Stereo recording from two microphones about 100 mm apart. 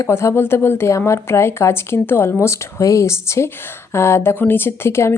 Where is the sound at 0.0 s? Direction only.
30° left (ahead or behind).